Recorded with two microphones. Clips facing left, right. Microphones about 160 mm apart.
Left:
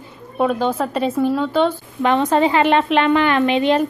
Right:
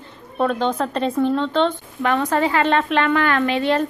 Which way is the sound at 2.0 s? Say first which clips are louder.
Left 3 dB; 20° left (ahead or behind).